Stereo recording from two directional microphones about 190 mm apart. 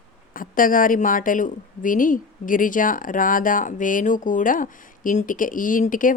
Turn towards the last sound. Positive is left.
turn(degrees=45)  # may be behind; listen again after turning